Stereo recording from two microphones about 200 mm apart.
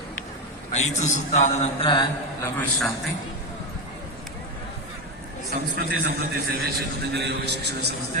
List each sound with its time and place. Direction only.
0.7 s a man's voice: 35° left (ahead or behind)
2.4 s a man's voice: 5° left (ahead or behind)
5.5 s a man's voice: 50° right (ahead or behind)